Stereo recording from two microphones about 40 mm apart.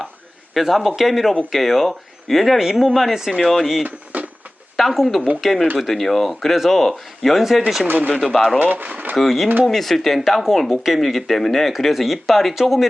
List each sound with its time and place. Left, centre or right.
0.5 s speech: centre
3.8 s wood: right
4.8 s speech: centre
7.9 s speech: right
8.2 s speech: centre
8.5 s speech: right
9.1 s speech: centre